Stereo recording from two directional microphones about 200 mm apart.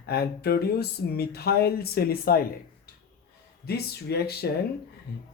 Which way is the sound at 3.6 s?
50° left (ahead or behind).